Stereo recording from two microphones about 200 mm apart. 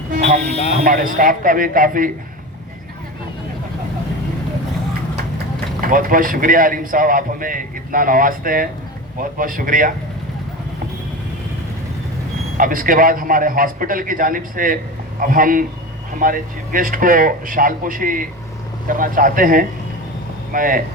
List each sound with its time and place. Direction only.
0.9 s a man's voice: 45° right (ahead or behind)
5.8 s a man's voice: 45° right (ahead or behind)
12.5 s a man's voice: 45° right (ahead or behind)